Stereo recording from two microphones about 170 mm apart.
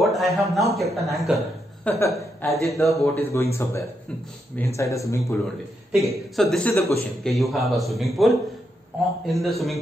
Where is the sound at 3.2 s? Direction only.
15° left (ahead or behind).